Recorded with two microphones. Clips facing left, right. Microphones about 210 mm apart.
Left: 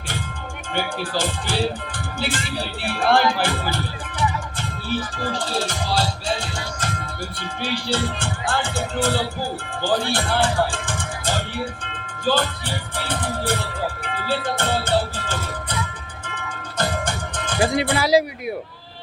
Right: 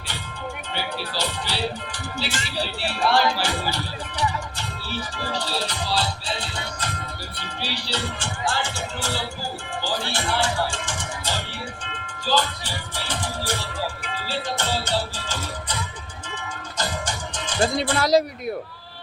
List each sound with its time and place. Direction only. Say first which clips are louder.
0.7 s speech: left 8 dB; 50° left (ahead or behind)
4.9 s music: left 5 dB; 50° left (ahead or behind)
7.6 s speech: left 6 dB; 50° left (ahead or behind)
16.3 s music: left 2 dB; 55° left (ahead or behind)
17.9 s speech: left 1 dB; 10° left (ahead or behind)